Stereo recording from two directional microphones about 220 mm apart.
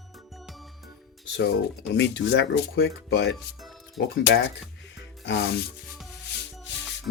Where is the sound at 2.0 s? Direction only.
55° left (ahead or behind).